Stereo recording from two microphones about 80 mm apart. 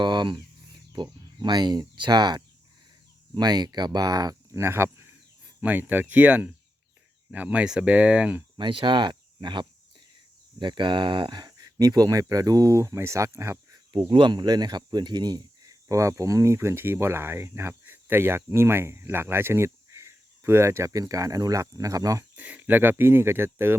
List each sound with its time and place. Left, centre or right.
0.0 s speech: right
4.5 s speech: right; by 8.4 s centre
8.5 s speech: right
14.1 s speech: right
14.3 s speech: right
22.4 s speech: centre